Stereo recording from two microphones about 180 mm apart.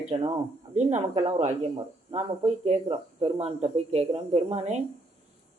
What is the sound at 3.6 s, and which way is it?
Speech, 35° right (ahead or behind).